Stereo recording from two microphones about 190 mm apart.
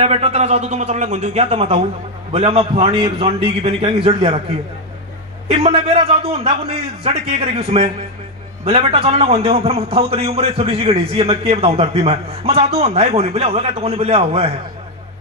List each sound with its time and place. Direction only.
0.0 s a man's voice: 35° right (ahead or behind)
5.5 s a man's voice: 30° right (ahead or behind)